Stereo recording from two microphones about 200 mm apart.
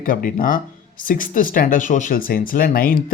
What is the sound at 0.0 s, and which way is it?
Speech, 45° left (ahead or behind).